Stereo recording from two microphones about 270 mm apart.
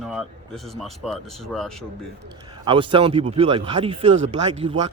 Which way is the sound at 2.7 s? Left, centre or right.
Centre.